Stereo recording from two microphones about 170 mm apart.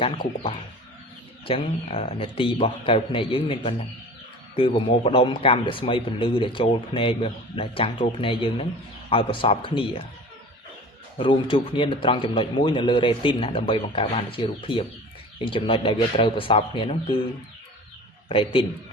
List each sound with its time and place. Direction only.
0.0 s speech: 30° left (ahead or behind)
11.2 s a man's voice: 30° left (ahead or behind)
18.3 s speech: 30° left (ahead or behind)